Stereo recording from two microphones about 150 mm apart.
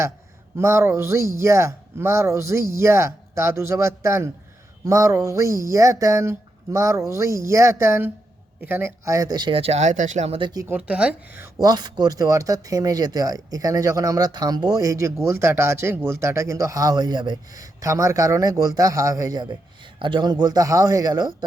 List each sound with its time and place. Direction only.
0.5 s speech: 15° right (ahead or behind); by 10.5 s 40° right (ahead or behind)
10.7 s speech: 10° right (ahead or behind); by 21.3 s 25° right (ahead or behind)